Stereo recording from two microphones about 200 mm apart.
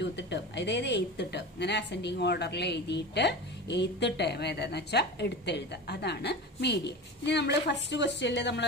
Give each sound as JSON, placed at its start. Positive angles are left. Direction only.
{"t": 0.0, "sound": "a woman's voice", "side_deg": 60}